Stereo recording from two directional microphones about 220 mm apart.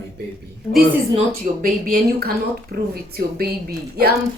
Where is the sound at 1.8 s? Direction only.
45° right (ahead or behind).